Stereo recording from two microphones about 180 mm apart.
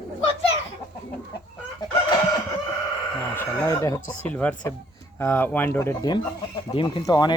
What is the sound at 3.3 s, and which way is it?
Chicken, 15° left (ahead or behind).